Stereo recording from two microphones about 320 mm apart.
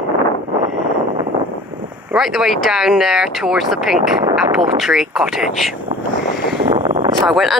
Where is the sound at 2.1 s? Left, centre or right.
Centre.